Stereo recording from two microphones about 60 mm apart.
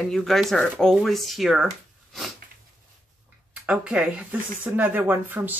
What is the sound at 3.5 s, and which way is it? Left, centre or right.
Speech, centre.